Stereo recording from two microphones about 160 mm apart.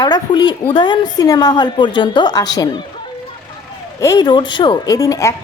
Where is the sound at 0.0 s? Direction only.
25° left (ahead or behind).